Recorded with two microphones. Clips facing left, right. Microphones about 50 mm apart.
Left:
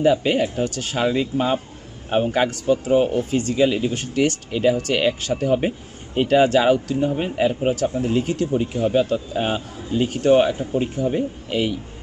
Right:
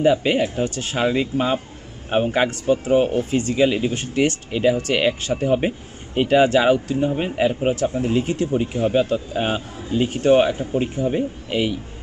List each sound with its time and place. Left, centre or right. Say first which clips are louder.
0.0 s speech: even; centre; by 4.4 s right
4.5 s speech: even; centre
7.8 s speech: even; right; by 11.8 s centre